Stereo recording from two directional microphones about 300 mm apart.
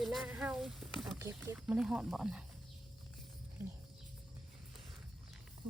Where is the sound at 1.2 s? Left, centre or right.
Centre.